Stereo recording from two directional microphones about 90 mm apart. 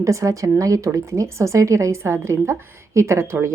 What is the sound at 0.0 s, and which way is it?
A woman's voice, 35° right (ahead or behind).